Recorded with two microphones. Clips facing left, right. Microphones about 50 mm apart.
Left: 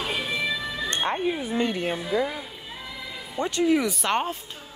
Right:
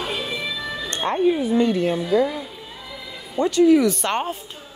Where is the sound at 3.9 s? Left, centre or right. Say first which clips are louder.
Right 2 dB; centre.